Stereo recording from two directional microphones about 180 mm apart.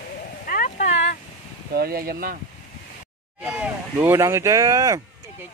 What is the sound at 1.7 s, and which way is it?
Speech, 55° right (ahead or behind).